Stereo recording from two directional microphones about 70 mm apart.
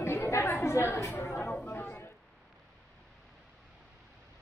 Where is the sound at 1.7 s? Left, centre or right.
Left.